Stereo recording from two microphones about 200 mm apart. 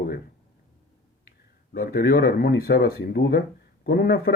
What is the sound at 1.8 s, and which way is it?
Speech, 45° left (ahead or behind).